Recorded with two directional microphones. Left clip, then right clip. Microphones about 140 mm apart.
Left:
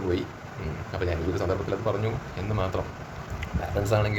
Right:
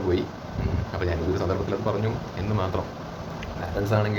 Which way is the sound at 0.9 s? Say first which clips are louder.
Right 1 dB; 20° left (ahead or behind).